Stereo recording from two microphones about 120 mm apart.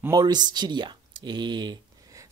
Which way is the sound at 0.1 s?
35° right (ahead or behind).